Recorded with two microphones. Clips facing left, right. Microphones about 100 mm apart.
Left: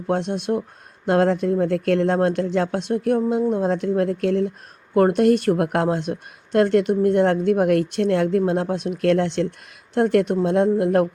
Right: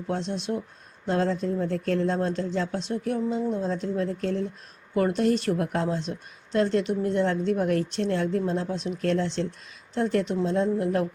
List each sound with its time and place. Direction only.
0.1 s speech: 60° left (ahead or behind)